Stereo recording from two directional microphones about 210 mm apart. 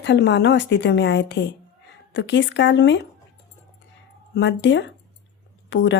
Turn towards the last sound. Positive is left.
turn(degrees=60)  # may be behind; listen again after turning